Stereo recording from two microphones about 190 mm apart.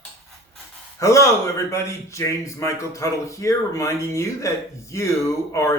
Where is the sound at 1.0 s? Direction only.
15° left (ahead or behind).